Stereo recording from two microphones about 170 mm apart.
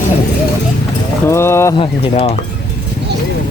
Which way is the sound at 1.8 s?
40° left (ahead or behind).